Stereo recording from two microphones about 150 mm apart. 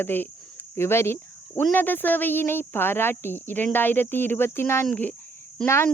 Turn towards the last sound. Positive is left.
turn(degrees=15)  # may be behind; listen again after turning